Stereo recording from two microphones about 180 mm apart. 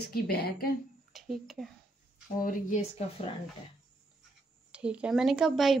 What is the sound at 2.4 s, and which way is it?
Speech, 50° left (ahead or behind).